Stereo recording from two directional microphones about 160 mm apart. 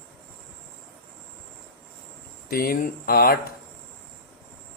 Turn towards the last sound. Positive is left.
turn(degrees=65)  # may be behind; listen again after turning